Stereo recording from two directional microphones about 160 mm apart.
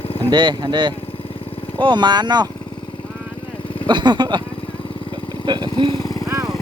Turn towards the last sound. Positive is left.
turn(degrees=25)  # may be behind; listen again after turning